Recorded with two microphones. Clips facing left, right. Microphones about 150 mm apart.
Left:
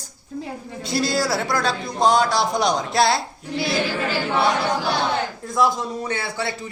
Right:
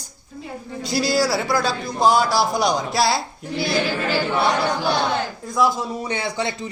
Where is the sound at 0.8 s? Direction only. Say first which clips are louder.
Right 2 dB; centre (ahead or behind).